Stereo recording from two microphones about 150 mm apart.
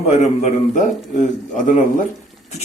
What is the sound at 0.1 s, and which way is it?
A man's voice, 50° left (ahead or behind).